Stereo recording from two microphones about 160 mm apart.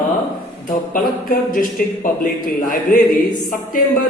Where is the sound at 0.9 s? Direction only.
60° left (ahead or behind).